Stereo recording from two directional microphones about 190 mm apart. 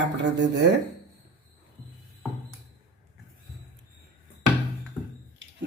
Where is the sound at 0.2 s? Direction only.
65° right (ahead or behind).